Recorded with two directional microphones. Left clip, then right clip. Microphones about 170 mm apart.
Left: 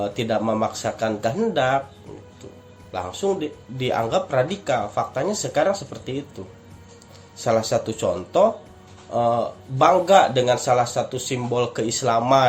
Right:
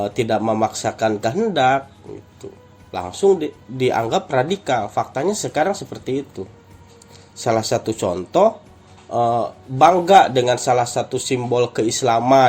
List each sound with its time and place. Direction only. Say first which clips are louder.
0.0 s speech: right 3 dB; 45° right (ahead or behind)